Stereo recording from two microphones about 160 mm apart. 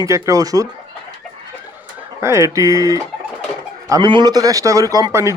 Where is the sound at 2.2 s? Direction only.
20° right (ahead or behind).